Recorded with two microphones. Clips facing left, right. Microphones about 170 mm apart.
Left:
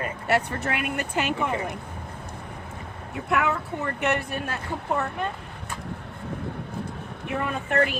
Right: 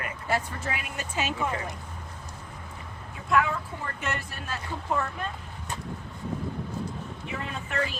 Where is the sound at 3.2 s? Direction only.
65° left (ahead or behind).